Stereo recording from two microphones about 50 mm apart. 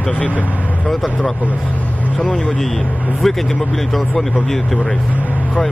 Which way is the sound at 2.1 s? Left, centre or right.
Left.